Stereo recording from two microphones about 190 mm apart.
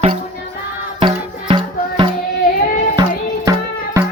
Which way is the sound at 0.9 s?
25° right (ahead or behind).